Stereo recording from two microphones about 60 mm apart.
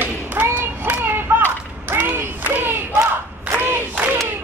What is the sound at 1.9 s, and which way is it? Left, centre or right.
Battle cry, right.